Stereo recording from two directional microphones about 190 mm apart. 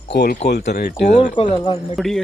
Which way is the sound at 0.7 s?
60° left (ahead or behind).